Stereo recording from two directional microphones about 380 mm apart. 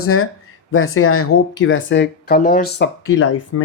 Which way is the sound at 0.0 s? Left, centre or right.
Left.